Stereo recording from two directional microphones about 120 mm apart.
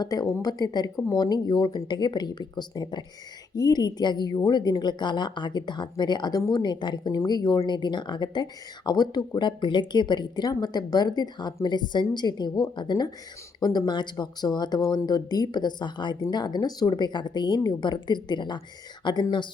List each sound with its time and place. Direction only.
0.0 s a woman's voice: 30° left (ahead or behind)